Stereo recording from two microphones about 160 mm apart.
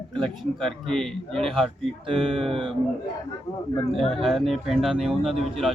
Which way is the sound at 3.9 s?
Centre (ahead or behind).